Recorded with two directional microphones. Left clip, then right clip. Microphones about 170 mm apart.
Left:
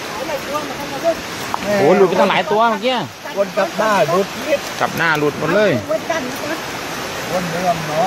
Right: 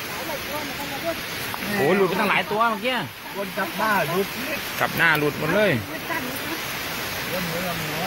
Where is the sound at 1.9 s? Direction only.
20° left (ahead or behind).